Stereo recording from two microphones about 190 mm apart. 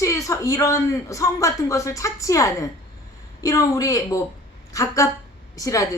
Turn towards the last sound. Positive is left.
turn(degrees=15)  # may be behind; listen again after turning